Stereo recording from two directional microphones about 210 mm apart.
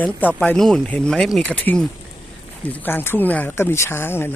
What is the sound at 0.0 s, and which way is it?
Speech, 10° left (ahead or behind).